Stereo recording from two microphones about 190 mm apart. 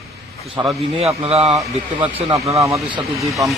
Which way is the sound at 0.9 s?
30° right (ahead or behind).